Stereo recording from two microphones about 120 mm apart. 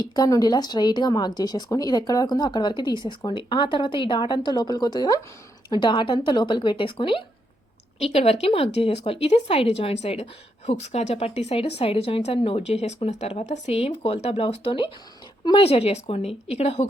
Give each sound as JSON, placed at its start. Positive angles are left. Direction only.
{"t": 0.0, "sound": "speech", "side_deg": 30}
{"t": 8.1, "sound": "a woman's voice", "side_deg": 55}